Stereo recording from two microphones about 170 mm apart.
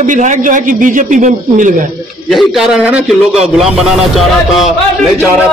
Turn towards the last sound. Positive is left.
turn(degrees=0)  # may be behind; listen again after turning